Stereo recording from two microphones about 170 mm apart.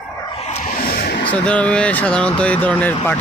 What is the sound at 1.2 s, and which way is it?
Speech, 10° left (ahead or behind).